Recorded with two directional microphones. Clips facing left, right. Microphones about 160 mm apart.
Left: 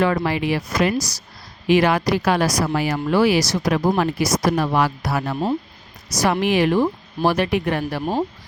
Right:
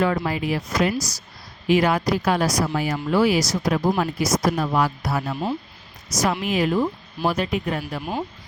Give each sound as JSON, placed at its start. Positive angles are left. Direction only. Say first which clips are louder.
{"t": 0.0, "sound": "speech", "louder": "left 3 dB", "side_deg": 80}